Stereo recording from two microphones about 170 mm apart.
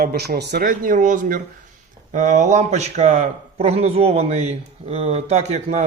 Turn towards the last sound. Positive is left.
turn(degrees=-40)  # may be behind; listen again after turning